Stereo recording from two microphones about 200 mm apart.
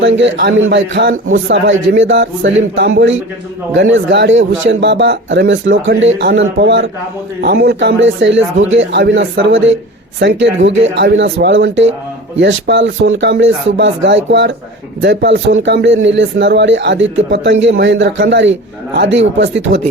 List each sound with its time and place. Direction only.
0.0 s speech: 65° right (ahead or behind)